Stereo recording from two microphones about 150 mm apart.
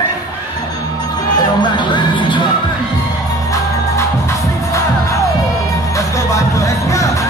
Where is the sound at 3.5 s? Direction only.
20° left (ahead or behind).